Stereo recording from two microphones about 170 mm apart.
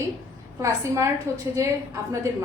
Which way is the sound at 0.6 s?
15° right (ahead or behind).